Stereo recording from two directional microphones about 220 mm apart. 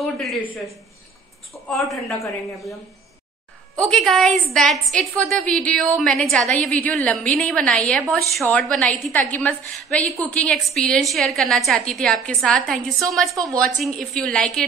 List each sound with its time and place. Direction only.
0.0 s a woman's voice: centre (ahead or behind)
13.3 s a woman's voice: 15° right (ahead or behind)
13.6 s a woman's voice: centre (ahead or behind)